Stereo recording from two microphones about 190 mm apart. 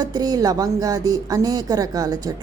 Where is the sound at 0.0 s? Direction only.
20° right (ahead or behind).